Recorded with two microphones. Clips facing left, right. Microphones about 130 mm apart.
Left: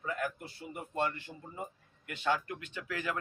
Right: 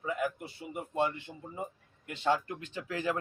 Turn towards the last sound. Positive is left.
turn(degrees=-30)  # may be behind; listen again after turning